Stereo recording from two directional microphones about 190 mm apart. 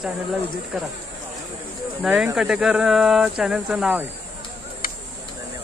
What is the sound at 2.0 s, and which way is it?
Speech, 5° right (ahead or behind).